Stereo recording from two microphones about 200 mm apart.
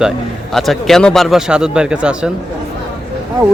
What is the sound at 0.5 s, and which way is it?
Speech, centre (ahead or behind).